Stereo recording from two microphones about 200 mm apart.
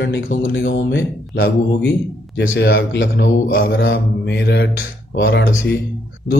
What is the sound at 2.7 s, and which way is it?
Speech, 65° left (ahead or behind).